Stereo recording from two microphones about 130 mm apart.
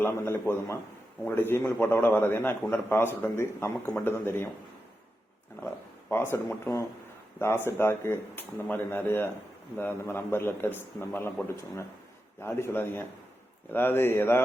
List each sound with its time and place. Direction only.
0.0 s a man's voice: 20° left (ahead or behind)
6.1 s a man's voice: 20° left (ahead or behind)